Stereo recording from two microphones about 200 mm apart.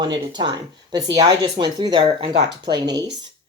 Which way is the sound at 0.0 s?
20° right (ahead or behind).